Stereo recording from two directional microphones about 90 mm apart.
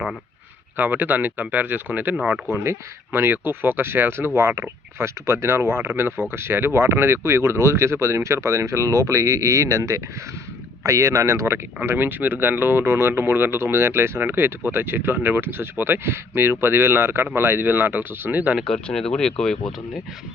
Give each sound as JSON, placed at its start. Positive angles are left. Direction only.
{"t": 0.8, "sound": "speech", "side_deg": -20}
{"t": 18.7, "sound": "speech", "side_deg": 5}